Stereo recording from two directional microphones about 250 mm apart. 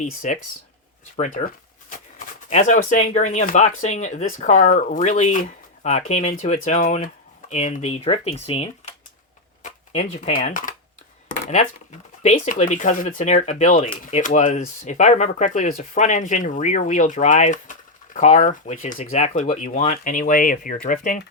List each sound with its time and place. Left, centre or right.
0.0 s speech: left
12.2 s speech: left